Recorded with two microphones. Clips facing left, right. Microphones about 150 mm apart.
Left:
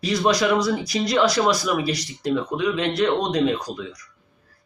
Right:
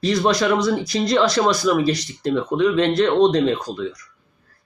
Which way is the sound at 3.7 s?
30° right (ahead or behind).